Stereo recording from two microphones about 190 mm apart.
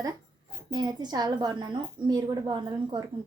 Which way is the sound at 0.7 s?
20° right (ahead or behind).